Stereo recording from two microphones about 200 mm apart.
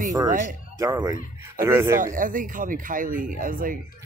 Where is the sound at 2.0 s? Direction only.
40° right (ahead or behind).